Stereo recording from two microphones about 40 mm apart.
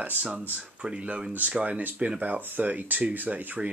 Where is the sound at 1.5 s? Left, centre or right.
Right.